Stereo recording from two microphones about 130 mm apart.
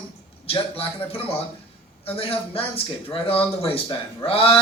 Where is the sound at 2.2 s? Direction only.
45° left (ahead or behind).